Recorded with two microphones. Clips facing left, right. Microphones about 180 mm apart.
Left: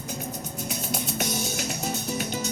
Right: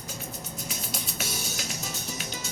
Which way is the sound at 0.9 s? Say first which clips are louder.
Left 9 dB; 60° left (ahead or behind).